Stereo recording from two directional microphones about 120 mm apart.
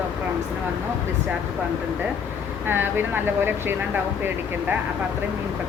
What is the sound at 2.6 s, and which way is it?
Speech, 15° right (ahead or behind).